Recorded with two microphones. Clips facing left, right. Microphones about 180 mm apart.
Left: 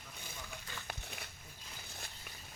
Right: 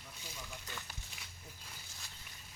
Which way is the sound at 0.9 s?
60° left (ahead or behind).